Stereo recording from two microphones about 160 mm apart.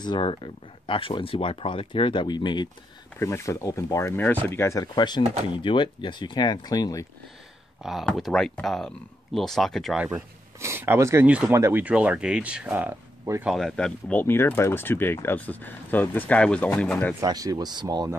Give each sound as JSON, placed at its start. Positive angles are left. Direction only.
{"t": 0.0, "sound": "speech", "side_deg": 30}
{"t": 3.2, "sound": "speech", "side_deg": 15}
{"t": 7.8, "sound": "speech", "side_deg": 0}
{"t": 10.0, "sound": "speech", "side_deg": -15}
{"t": 17.2, "sound": "speech", "side_deg": -25}